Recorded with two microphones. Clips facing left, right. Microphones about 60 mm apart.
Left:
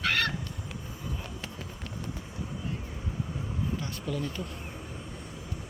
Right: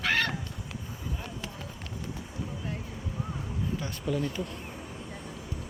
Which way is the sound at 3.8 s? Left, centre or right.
Centre.